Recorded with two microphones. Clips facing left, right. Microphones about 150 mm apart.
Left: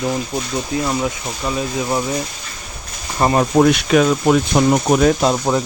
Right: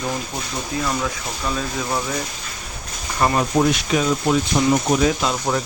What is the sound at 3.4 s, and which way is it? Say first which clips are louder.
Speech: left 5 dB; 65° left (ahead or behind).